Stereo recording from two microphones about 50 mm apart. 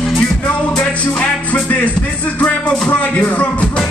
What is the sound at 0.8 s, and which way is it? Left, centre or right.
Music, left.